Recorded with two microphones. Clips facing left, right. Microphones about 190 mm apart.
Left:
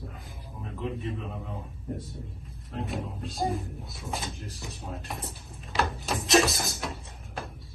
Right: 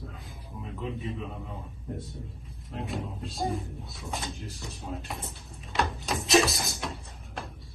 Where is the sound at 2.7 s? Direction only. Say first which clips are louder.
Left 1 dB; centre (ahead or behind).